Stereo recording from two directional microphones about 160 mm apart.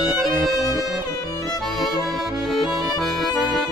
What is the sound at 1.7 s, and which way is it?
Music, centre (ahead or behind).